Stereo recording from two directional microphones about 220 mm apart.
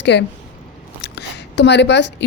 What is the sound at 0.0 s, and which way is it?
Speech, 50° left (ahead or behind).